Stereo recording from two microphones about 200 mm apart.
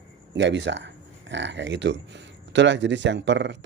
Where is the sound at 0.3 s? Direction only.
65° right (ahead or behind).